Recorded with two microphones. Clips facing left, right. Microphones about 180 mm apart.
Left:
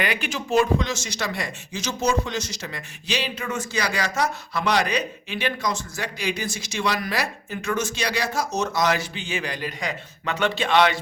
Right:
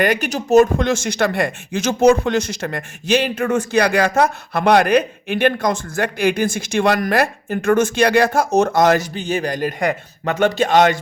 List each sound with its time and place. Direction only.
0.0 s speech: 45° right (ahead or behind)